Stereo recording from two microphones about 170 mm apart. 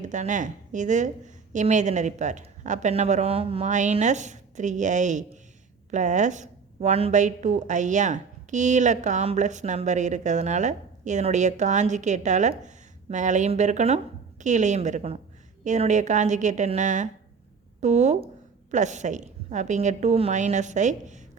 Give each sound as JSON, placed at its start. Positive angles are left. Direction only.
{"t": 0.0, "sound": "a woman's voice", "side_deg": -45}